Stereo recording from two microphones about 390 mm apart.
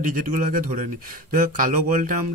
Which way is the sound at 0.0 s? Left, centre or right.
Right.